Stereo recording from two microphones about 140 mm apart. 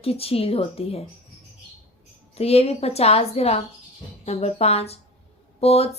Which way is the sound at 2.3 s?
45° left (ahead or behind).